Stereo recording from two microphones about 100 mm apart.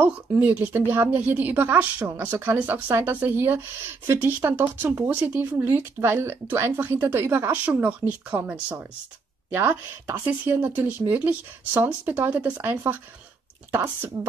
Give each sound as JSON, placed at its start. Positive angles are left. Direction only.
{"t": 0.0, "sound": "speech", "side_deg": -15}
{"t": 12.6, "sound": "speech", "side_deg": -25}